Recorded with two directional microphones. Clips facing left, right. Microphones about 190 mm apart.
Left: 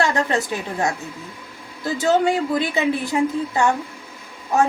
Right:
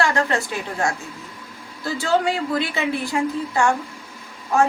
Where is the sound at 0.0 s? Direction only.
20° left (ahead or behind).